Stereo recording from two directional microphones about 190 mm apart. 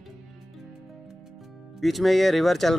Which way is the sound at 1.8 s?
Centre (ahead or behind).